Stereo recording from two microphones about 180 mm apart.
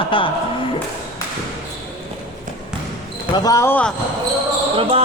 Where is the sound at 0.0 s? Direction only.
30° left (ahead or behind).